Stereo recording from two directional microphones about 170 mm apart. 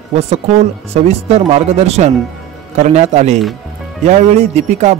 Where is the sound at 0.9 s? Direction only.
40° right (ahead or behind).